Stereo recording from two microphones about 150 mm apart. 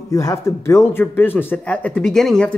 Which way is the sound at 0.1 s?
20° left (ahead or behind).